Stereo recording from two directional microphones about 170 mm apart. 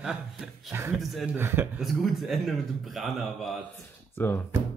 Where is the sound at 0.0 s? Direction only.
5° right (ahead or behind).